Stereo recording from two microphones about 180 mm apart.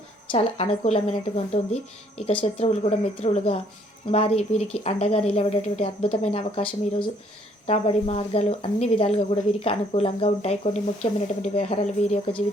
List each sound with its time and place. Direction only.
0.3 s speech: 35° left (ahead or behind)
7.7 s speech: 35° left (ahead or behind)